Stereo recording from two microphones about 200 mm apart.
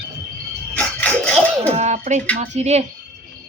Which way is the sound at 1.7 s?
35° right (ahead or behind).